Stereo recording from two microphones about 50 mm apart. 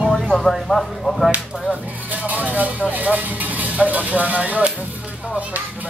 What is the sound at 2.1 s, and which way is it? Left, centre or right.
Music, right.